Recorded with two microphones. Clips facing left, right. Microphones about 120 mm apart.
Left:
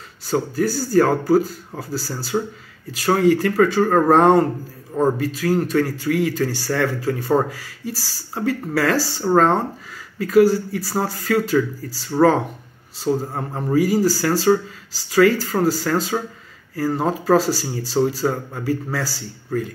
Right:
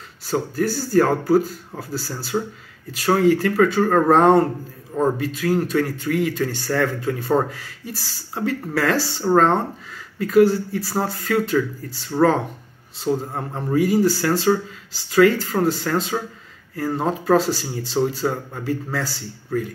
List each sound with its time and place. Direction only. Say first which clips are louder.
0.3 s speech: left 1 dB; centre (ahead or behind)
4.9 s a man's voice: left 1 dB; 15° left (ahead or behind)
5.4 s a man's voice: left 1 dB; centre (ahead or behind)